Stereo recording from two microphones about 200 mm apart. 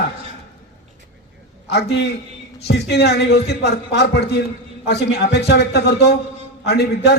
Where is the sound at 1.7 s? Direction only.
55° left (ahead or behind).